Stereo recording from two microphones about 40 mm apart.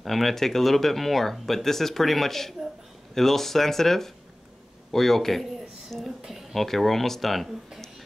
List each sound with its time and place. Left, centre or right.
0.0 s speech: centre
4.9 s a sound: centre
6.5 s speech: centre